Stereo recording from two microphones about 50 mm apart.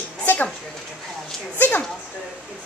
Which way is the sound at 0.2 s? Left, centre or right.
Left.